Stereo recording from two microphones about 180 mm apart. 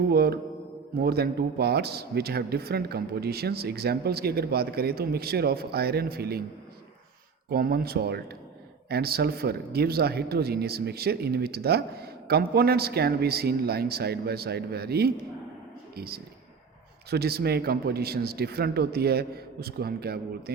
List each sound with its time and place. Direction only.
0.1 s speech: 60° right (ahead or behind)
7.5 s speech: 60° right (ahead or behind)